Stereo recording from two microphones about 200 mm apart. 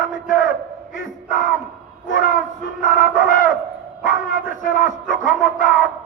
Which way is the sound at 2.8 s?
40° left (ahead or behind).